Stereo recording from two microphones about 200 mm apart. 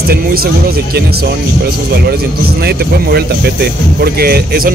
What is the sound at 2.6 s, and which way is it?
Speech, 55° right (ahead or behind).